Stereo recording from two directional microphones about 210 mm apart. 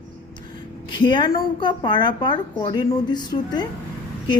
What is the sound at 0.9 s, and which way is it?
Speech, 20° left (ahead or behind).